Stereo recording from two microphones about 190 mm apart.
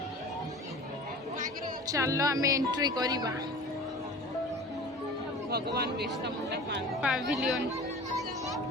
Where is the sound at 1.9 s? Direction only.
15° right (ahead or behind).